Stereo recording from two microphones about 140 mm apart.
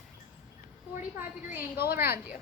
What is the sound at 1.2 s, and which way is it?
Speech, 15° right (ahead or behind).